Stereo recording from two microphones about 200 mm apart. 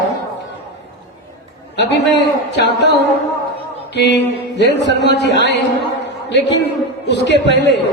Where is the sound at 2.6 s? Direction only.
60° left (ahead or behind).